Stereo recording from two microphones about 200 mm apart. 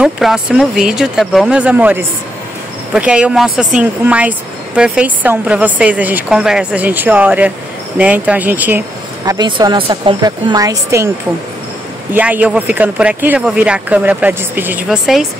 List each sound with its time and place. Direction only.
0.0 s speech: 5° right (ahead or behind)
12.1 s speech: 5° right (ahead or behind)